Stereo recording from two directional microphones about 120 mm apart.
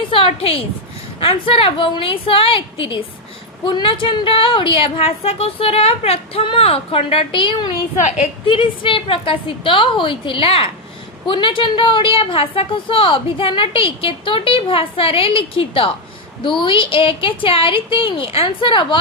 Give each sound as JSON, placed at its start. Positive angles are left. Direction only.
{"t": 0.1, "sound": "a woman's voice", "side_deg": 55}
{"t": 7.9, "sound": "a woman's voice", "side_deg": 75}
{"t": 8.4, "sound": "a woman's voice", "side_deg": 45}